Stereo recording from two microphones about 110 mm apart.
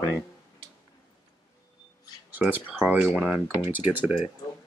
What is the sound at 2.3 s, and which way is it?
Speech, 15° right (ahead or behind).